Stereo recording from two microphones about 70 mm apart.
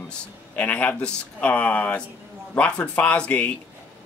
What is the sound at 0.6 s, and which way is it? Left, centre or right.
Speech, left.